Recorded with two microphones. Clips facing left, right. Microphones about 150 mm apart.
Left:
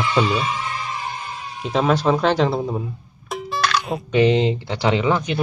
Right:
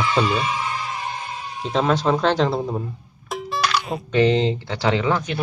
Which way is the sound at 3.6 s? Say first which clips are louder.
Left 2 dB; centre (ahead or behind).